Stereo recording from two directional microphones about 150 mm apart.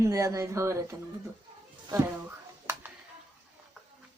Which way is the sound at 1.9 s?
15° right (ahead or behind).